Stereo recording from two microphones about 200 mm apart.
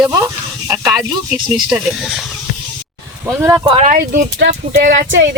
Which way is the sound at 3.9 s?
45° right (ahead or behind).